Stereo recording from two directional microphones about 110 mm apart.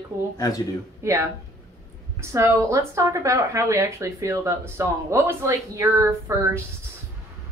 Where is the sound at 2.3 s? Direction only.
25° right (ahead or behind).